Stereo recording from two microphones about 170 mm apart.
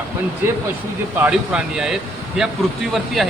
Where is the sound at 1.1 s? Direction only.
10° right (ahead or behind).